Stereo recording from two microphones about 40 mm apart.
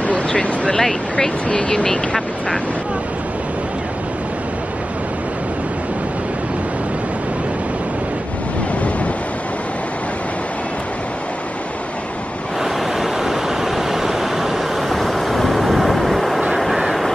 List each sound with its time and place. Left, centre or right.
0.0 s a sound: left
1.1 s speech: left
13.0 s vehicle: centre